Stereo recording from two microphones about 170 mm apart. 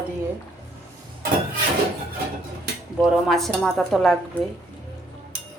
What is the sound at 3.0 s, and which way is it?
Speech, centre (ahead or behind).